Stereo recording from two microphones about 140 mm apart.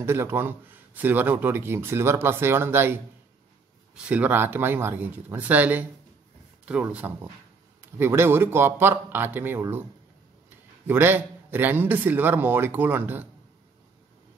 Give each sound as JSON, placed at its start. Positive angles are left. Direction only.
{"t": 0.0, "sound": "speech", "side_deg": -15}
{"t": 10.9, "sound": "speech", "side_deg": -15}